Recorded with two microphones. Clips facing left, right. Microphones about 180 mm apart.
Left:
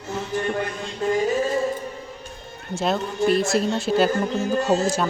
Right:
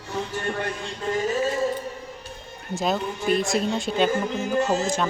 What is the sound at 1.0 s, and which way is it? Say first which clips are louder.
Music: left 6 dB; 25° left (ahead or behind).